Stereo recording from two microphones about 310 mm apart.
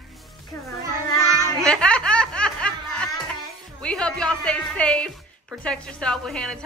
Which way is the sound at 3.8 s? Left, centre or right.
Centre.